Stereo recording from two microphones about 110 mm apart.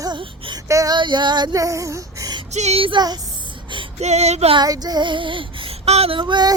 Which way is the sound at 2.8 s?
45° right (ahead or behind).